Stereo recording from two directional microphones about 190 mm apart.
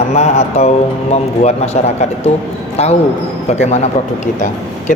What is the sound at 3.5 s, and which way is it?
Speech, 35° left (ahead or behind).